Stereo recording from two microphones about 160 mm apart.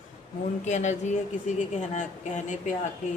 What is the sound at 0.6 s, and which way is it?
Speech, 50° left (ahead or behind).